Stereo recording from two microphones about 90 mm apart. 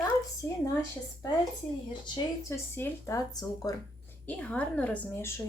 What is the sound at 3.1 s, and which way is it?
Speech, 45° left (ahead or behind).